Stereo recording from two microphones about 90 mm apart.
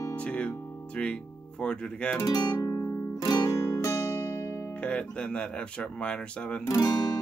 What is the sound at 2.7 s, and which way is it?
Guitar, 35° left (ahead or behind).